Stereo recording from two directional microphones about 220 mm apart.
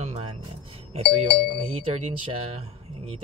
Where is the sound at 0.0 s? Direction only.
30° right (ahead or behind).